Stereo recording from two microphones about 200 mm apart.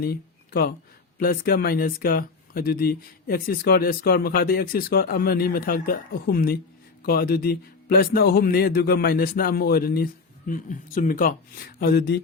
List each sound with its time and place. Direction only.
0.0 s speech: 50° left (ahead or behind)